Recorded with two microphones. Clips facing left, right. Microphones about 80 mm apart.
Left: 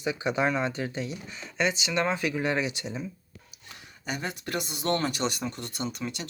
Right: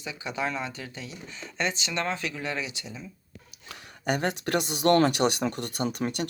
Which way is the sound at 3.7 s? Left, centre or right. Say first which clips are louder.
Right 7 dB; right.